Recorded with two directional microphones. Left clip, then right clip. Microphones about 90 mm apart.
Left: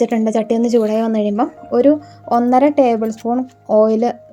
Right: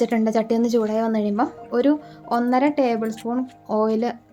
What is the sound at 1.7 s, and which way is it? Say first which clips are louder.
Speech: left 8 dB; 20° left (ahead or behind).